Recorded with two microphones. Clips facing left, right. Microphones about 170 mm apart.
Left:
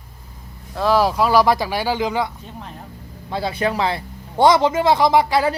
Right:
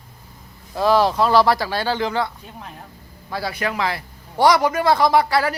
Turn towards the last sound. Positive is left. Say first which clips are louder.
# left 1 dB
turn(degrees=20)  # may be behind; listen again after turning